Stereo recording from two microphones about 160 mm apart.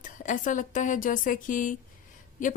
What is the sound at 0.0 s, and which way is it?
A woman's voice, 50° left (ahead or behind).